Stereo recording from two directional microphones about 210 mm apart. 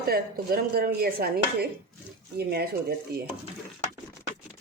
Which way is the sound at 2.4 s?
45° right (ahead or behind).